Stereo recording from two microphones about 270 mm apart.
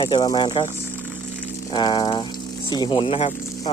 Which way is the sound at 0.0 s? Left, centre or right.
Centre.